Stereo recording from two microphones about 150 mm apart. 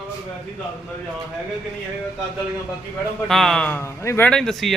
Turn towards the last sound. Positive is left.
turn(degrees=0)  # may be behind; listen again after turning